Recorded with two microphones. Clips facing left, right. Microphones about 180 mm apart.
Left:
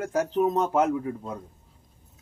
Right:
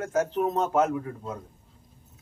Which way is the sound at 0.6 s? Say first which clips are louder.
Even; 15° left (ahead or behind).